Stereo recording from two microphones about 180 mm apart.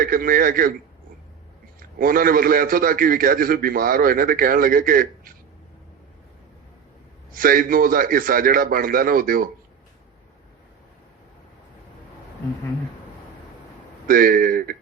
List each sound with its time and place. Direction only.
0.0 s a man's voice: 50° right (ahead or behind)
2.0 s a man's voice: 50° right (ahead or behind)
7.3 s a man's voice: 50° right (ahead or behind)
14.1 s a man's voice: 50° right (ahead or behind)